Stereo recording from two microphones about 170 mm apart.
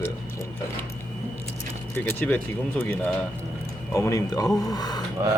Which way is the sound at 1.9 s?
10° left (ahead or behind).